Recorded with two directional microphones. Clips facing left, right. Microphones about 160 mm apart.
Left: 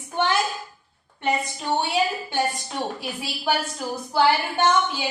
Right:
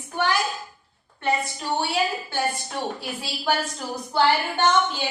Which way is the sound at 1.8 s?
20° left (ahead or behind).